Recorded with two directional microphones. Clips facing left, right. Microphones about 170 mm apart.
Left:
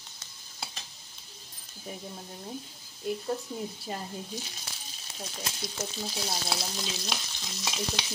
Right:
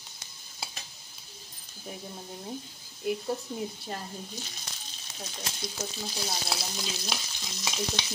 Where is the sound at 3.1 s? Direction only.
5° right (ahead or behind).